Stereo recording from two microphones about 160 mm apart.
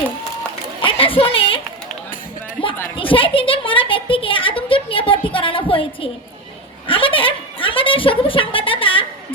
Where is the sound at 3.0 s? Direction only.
35° left (ahead or behind).